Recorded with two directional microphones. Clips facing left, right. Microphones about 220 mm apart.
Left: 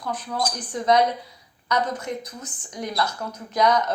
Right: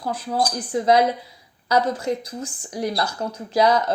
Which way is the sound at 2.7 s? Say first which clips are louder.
Right 2 dB; 30° right (ahead or behind).